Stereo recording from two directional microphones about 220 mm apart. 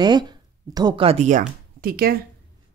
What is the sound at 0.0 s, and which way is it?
Speech, 20° right (ahead or behind).